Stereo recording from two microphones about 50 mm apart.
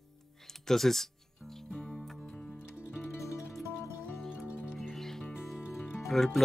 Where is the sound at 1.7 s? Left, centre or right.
Left.